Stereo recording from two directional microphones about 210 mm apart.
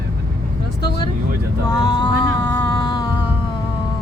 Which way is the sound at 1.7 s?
20° left (ahead or behind).